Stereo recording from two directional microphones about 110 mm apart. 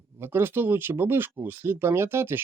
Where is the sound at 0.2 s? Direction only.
20° right (ahead or behind).